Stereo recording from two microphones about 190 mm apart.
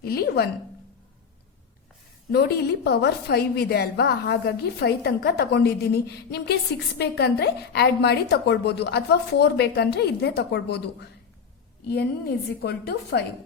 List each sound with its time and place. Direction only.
0.0 s a woman's voice: 55° left (ahead or behind)
2.3 s a woman's voice: 60° left (ahead or behind)
12.6 s a woman's voice: 60° left (ahead or behind)